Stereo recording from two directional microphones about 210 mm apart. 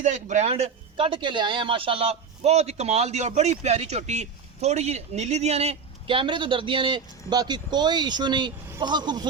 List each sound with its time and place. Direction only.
0.0 s speech: 35° right (ahead or behind)